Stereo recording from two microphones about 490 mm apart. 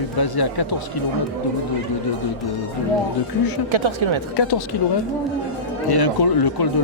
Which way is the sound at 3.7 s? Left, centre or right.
Right.